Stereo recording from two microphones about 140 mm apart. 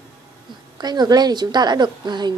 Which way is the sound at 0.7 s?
30° right (ahead or behind).